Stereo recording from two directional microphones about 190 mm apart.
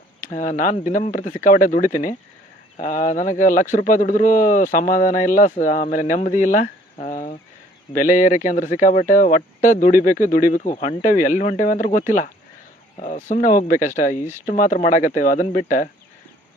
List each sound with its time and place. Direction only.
0.2 s speech: 40° left (ahead or behind)